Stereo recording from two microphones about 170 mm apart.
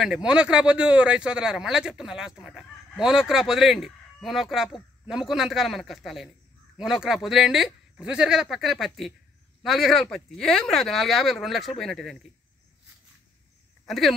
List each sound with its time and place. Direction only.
0.0 s speech: 5° right (ahead or behind)
13.8 s speech: centre (ahead or behind)